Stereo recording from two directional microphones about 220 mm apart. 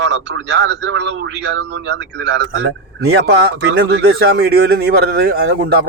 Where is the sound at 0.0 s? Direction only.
55° right (ahead or behind).